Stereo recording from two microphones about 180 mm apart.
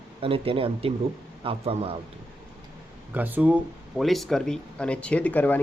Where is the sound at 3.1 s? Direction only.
10° right (ahead or behind).